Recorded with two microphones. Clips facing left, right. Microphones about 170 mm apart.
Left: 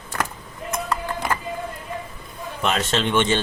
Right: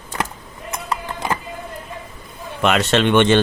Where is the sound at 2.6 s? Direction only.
85° right; by 3.4 s 65° right (ahead or behind).